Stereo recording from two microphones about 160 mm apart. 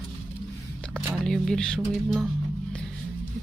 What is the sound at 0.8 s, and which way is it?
Speech, 5° left (ahead or behind).